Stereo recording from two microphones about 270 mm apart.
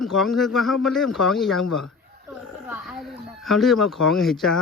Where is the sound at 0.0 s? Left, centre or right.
Centre.